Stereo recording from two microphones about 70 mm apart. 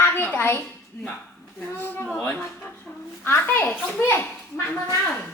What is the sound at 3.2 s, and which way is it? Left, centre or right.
Speech, left.